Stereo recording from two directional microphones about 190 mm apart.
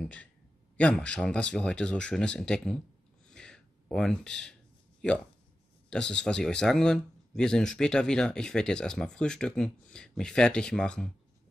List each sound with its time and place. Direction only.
0.0 s a man's voice: 5° left (ahead or behind)
3.3 s a sound: 5° left (ahead or behind)
5.0 s speech: 5° left (ahead or behind)